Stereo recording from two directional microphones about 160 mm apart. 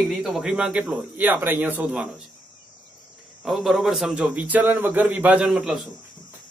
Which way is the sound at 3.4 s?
Centre (ahead or behind).